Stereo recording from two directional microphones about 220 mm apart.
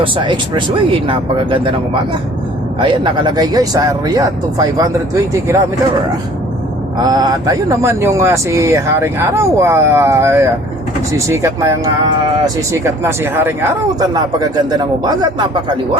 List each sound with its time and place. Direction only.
0.0 s speech: 20° right (ahead or behind)
2.8 s speech: 20° right (ahead or behind)
7.1 s speech: 15° right (ahead or behind)